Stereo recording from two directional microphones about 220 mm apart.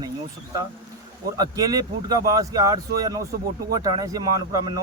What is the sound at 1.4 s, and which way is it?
A man's voice, 15° right (ahead or behind).